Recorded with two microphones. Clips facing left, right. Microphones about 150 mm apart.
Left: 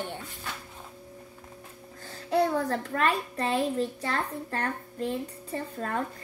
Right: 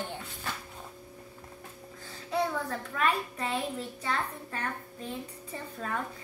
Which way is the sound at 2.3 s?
65° left (ahead or behind).